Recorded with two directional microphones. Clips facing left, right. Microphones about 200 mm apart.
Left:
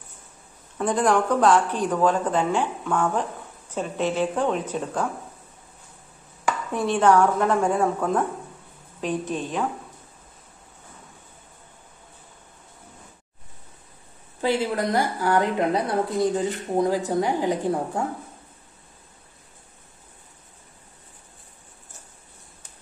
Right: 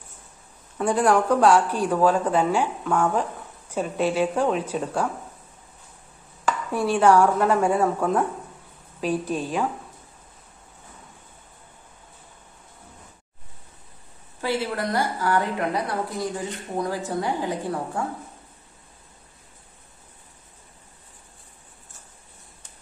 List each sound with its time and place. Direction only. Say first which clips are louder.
0.7 s speech: right 1 dB; 10° right (ahead or behind)
6.7 s speech: right 1 dB; 10° right (ahead or behind)
14.4 s a woman's voice: left 3 dB; 20° left (ahead or behind)